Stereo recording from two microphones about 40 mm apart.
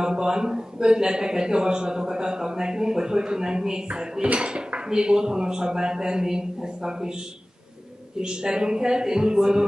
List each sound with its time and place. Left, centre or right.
0.0 s speech: centre
8.2 s speech: centre